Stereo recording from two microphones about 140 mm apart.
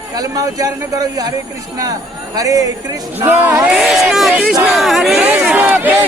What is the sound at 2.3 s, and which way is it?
A man's voice, 25° right (ahead or behind).